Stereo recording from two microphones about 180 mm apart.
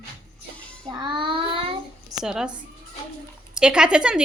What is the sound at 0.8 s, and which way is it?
Child singing, 25° right (ahead or behind).